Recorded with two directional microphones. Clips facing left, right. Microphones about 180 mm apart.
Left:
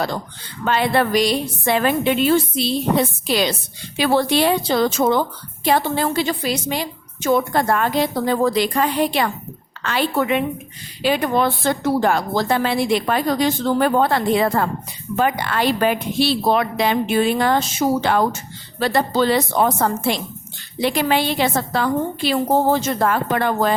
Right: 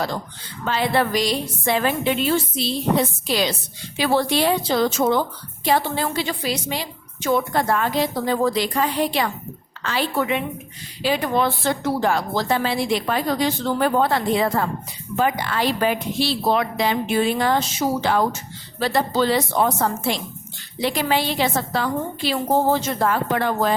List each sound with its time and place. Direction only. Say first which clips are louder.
0.6 s a woman's voice: left 3 dB; 60° left (ahead or behind)
3.2 s a woman's voice: left 2 dB; 60° left (ahead or behind)